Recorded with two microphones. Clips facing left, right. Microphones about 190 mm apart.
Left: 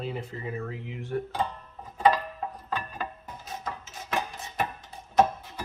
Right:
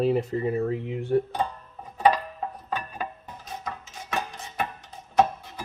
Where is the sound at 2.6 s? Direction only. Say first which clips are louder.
Right 1 dB; 15° right (ahead or behind).